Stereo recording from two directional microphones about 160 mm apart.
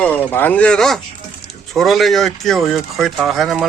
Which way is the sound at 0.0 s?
10° left (ahead or behind).